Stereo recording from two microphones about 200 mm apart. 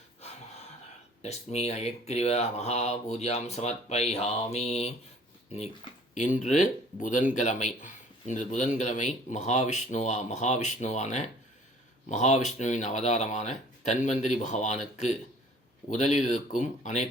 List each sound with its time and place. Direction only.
0.2 s gasp: 35° left (ahead or behind)
1.2 s speech: 35° left (ahead or behind)